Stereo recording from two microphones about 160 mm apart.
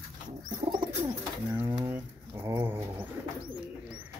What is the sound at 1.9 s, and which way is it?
Pigeon, 15° right (ahead or behind).